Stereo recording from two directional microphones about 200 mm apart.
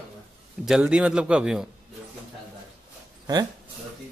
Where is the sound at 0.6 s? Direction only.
5° right (ahead or behind).